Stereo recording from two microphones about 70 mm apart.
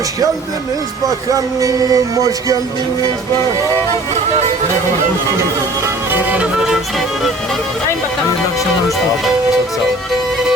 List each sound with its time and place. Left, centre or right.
1.3 s music: right
6.1 s music: right